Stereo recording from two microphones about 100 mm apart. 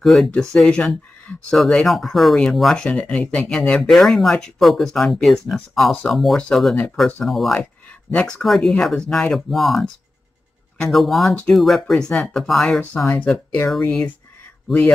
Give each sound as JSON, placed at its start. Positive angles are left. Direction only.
{"t": 0.0, "sound": "speech", "side_deg": 0}
{"t": 10.9, "sound": "speech", "side_deg": 0}